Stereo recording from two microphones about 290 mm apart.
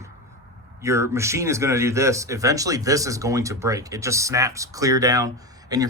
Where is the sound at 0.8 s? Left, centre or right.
Centre.